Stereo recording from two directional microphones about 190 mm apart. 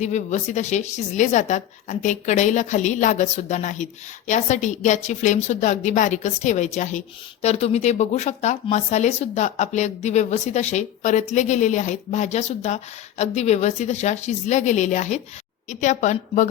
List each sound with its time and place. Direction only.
0.0 s speech: 40° left (ahead or behind)